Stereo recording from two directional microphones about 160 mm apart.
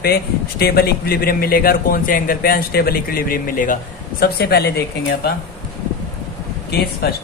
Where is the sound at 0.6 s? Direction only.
75° left (ahead or behind).